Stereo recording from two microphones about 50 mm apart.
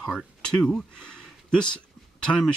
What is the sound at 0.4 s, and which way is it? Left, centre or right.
Speech, centre.